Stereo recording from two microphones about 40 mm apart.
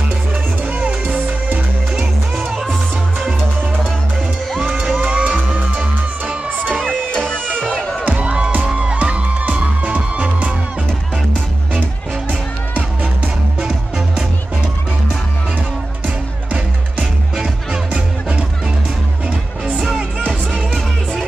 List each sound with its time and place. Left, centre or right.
0.7 s music: right
2.0 s music: centre
2.5 s music: centre
4.6 s music: centre
5.0 s music: right
6.9 s music: left
8.1 s music: right
8.9 s music: right
19.6 s music: right